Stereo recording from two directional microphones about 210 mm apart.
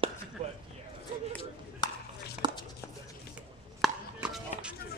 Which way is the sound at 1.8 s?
20° left (ahead or behind).